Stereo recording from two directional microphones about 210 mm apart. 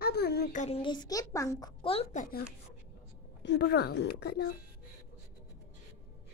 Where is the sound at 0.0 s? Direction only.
50° left (ahead or behind).